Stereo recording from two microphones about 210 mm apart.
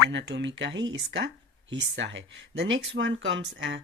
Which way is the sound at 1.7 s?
60° right (ahead or behind).